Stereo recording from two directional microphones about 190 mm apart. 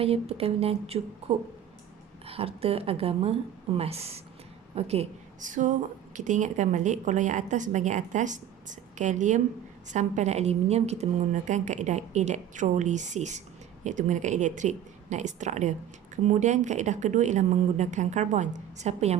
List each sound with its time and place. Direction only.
0.0 s a woman's voice: 30° right (ahead or behind)